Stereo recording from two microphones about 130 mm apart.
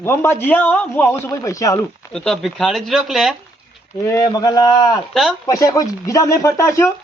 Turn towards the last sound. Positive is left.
turn(degrees=25)  # may be behind; listen again after turning